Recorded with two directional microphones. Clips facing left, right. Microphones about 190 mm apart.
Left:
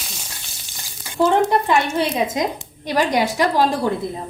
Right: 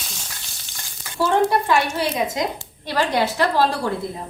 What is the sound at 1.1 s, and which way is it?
Speech, 20° left (ahead or behind).